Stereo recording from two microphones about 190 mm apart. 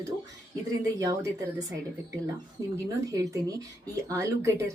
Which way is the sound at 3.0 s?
15° right (ahead or behind).